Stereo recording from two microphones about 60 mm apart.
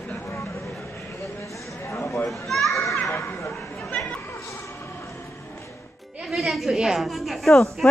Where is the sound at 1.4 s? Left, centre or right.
Left.